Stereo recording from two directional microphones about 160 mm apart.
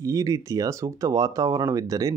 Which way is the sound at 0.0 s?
20° right (ahead or behind).